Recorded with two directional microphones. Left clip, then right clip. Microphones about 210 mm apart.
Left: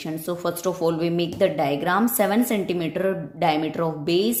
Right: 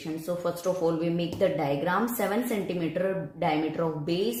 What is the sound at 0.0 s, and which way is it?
A woman's voice, 40° left (ahead or behind).